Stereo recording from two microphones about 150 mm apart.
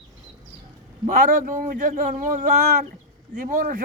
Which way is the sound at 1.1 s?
65° right (ahead or behind).